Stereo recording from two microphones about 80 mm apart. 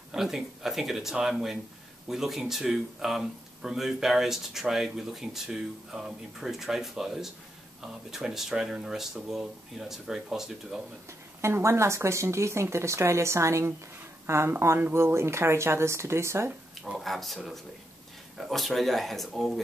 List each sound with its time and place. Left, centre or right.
0.1 s speech: centre
11.4 s speech: right
16.8 s speech: centre